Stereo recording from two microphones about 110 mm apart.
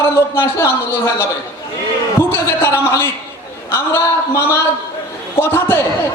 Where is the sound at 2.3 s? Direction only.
25° left (ahead or behind).